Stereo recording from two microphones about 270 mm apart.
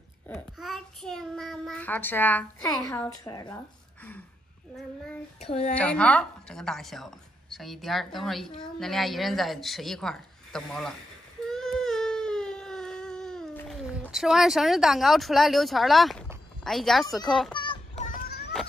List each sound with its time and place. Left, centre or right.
0.3 s child singing: centre
2.9 s speech: centre
5.4 s a sound: left
5.8 s a woman's voice: centre
11.4 s baby cry: centre
16.6 s a woman's voice: centre
17.5 s child singing: centre
18.5 s a sound: centre